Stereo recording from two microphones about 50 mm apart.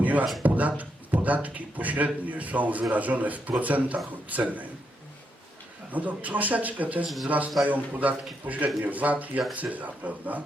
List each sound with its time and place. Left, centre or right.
0.0 s a sound: right
0.4 s a man's voice: right
5.9 s a man's voice: right